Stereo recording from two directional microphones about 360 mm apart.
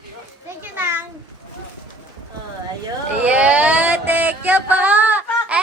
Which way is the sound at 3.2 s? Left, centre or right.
Centre.